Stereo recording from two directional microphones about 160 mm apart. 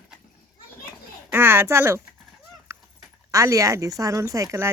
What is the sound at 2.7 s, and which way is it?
Goose, 20° right (ahead or behind).